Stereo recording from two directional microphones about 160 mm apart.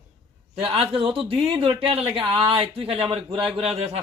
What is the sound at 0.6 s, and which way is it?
A man's voice, 35° right (ahead or behind).